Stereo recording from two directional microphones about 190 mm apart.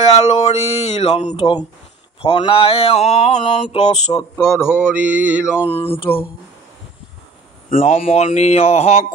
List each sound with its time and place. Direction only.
0.1 s mantra: 30° left (ahead or behind)
4.6 s mantra: 5° right (ahead or behind)
5.7 s a sound: 30° left (ahead or behind)
7.7 s mantra: 40° left (ahead or behind)